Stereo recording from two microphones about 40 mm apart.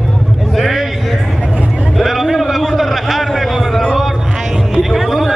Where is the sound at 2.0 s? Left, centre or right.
Centre.